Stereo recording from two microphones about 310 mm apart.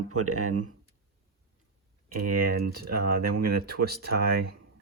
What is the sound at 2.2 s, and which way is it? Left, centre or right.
Speech, right.